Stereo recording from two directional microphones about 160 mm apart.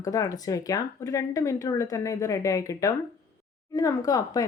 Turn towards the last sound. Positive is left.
turn(degrees=20)  # may be behind; listen again after turning